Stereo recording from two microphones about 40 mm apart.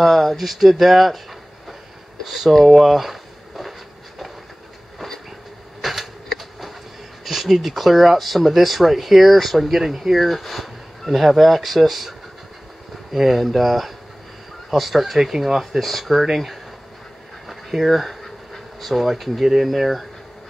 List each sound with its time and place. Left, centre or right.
0.0 s speech: centre
2.2 s speech: centre
2.5 s a sound: centre
5.8 s typewriter: centre
7.2 s speech: centre
10.1 s speech: centre
17.5 s a sound: centre
18.8 s speech: centre